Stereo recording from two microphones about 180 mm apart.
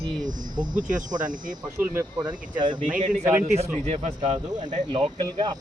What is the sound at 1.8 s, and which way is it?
Speech, 15° right (ahead or behind).